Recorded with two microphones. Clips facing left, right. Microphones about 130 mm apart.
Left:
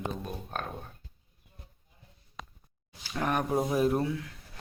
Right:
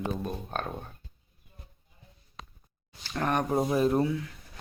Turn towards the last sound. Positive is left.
turn(degrees=0)  # may be behind; listen again after turning